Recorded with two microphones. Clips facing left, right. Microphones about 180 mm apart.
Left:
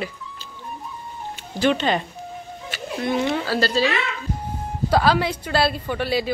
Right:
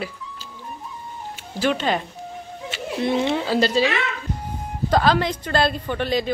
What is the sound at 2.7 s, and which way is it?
Speech, 25° right (ahead or behind).